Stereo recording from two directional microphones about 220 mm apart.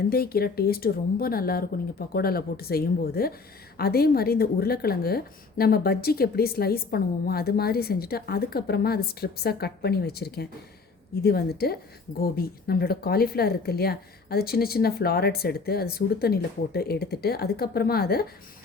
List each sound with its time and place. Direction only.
0.1 s a woman's voice: 45° left (ahead or behind)